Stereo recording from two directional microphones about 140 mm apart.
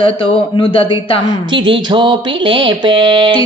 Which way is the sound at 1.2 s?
35° right (ahead or behind).